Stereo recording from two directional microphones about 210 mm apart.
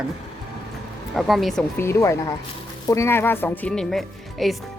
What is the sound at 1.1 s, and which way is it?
Speech, centre (ahead or behind).